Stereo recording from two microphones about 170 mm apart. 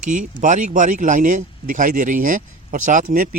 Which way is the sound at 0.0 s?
50° right (ahead or behind).